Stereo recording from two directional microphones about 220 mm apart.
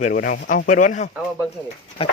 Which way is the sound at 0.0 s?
40° left (ahead or behind).